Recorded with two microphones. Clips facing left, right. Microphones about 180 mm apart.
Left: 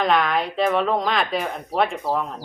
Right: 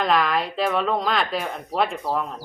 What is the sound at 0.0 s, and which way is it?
Speech, centre (ahead or behind).